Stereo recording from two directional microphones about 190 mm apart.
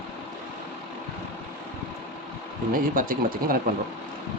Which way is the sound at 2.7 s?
45° right (ahead or behind).